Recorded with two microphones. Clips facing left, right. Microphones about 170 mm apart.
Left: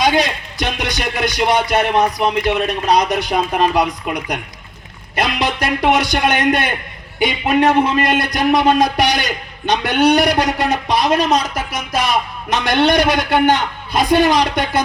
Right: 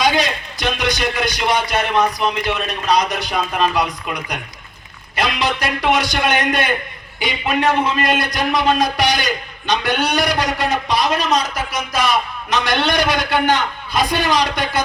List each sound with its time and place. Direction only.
0.0 s a man's voice: 55° left (ahead or behind)